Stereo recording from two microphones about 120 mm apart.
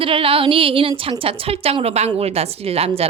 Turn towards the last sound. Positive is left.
turn(degrees=-55)  # may be behind; listen again after turning